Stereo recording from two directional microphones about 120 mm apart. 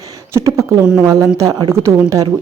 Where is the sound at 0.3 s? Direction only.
25° right (ahead or behind).